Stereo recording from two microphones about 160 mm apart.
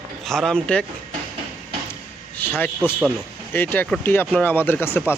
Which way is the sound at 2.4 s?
10° left (ahead or behind).